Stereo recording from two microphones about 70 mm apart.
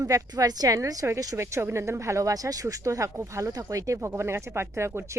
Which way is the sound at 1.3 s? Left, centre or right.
Right.